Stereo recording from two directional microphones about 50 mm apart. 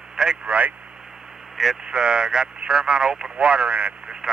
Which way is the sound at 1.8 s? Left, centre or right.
Centre.